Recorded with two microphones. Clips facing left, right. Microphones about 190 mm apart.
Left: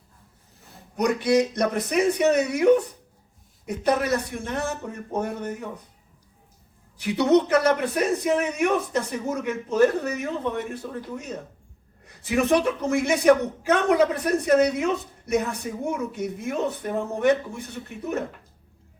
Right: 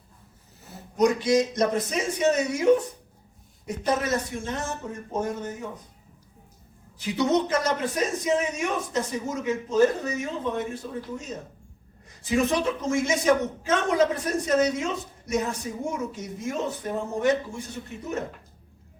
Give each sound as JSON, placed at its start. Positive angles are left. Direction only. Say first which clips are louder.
{"t": 0.6, "sound": "a sound", "louder": "right 5 dB", "side_deg": 0}
{"t": 0.9, "sound": "a man's voice", "louder": "even", "side_deg": 65}
{"t": 3.7, "sound": "a man's voice", "louder": "left 3 dB", "side_deg": 65}
{"t": 7.0, "sound": "a man's voice", "louder": "left 4 dB", "side_deg": 60}
{"t": 12.0, "sound": "a man's voice", "louder": "left 1 dB", "side_deg": 60}